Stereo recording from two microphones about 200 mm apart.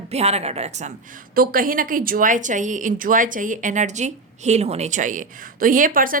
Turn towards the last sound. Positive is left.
turn(degrees=-45)  # may be behind; listen again after turning